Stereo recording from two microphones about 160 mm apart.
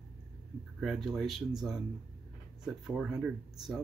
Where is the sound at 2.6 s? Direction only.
5° right (ahead or behind).